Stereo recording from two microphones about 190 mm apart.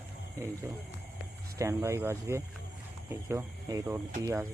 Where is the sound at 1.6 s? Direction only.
15° right (ahead or behind).